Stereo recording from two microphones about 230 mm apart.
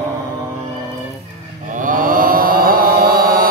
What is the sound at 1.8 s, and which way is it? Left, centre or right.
Mantra, right.